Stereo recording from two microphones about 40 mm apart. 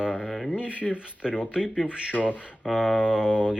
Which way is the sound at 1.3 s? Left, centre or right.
Centre.